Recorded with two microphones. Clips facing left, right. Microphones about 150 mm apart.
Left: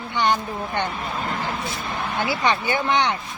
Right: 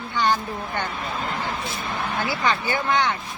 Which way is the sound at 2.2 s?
25° left (ahead or behind).